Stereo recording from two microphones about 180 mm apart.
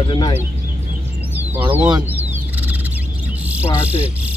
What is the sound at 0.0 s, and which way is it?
Speech, 30° left (ahead or behind).